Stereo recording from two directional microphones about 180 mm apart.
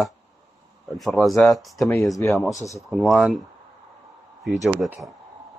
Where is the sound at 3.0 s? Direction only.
Centre (ahead or behind).